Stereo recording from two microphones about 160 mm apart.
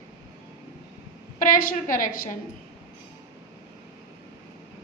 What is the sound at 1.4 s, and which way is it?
Speech, 60° left (ahead or behind).